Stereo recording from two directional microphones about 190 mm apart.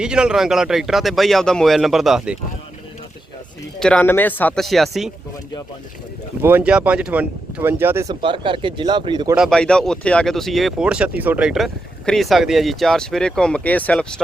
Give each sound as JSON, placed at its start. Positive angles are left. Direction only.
{"t": 0.0, "sound": "speech", "side_deg": -5}
{"t": 3.8, "sound": "speech", "side_deg": 5}
{"t": 6.4, "sound": "speech", "side_deg": -10}
{"t": 8.0, "sound": "speech", "side_deg": -25}
{"t": 9.3, "sound": "speech", "side_deg": 0}